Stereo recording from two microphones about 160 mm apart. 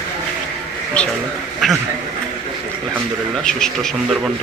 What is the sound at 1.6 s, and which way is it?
Speech, centre (ahead or behind).